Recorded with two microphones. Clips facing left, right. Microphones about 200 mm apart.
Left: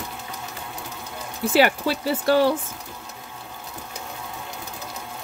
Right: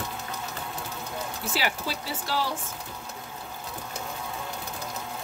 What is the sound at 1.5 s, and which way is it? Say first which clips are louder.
Speech: left 12 dB; 60° left (ahead or behind).